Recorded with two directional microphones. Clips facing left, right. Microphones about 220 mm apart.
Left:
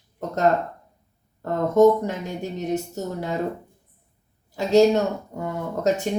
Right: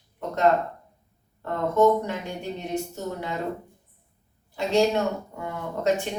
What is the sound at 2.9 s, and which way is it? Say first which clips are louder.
Speech: left 3 dB; 40° left (ahead or behind).